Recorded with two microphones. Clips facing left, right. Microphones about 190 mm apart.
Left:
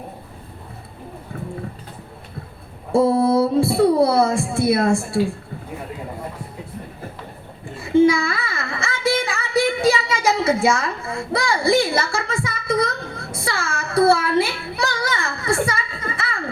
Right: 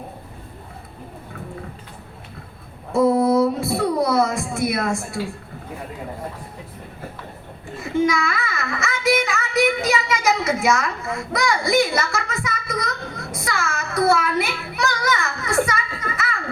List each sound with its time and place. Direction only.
2.9 s speech: 30° left (ahead or behind)
7.8 s child singing: 30° left (ahead or behind)